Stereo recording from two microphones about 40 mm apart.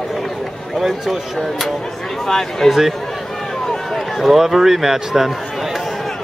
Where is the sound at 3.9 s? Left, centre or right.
Centre.